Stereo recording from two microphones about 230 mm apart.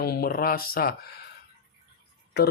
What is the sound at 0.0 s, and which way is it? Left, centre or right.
Speech, left.